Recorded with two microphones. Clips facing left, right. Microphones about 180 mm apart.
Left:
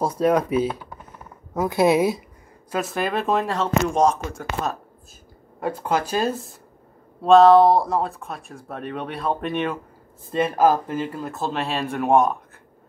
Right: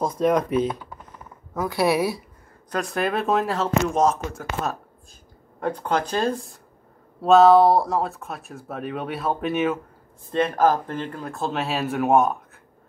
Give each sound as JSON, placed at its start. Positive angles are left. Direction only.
{"t": 0.0, "sound": "speech", "side_deg": 10}
{"t": 1.5, "sound": "speech", "side_deg": 20}
{"t": 2.7, "sound": "speech", "side_deg": 0}
{"t": 10.3, "sound": "speech", "side_deg": 10}